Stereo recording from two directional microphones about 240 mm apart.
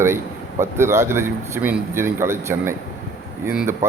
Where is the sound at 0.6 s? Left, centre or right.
Centre.